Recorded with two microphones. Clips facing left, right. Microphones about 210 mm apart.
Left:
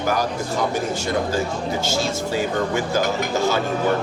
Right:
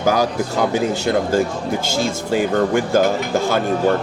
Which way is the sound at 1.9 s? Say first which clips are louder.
Right 5 dB; 55° right (ahead or behind).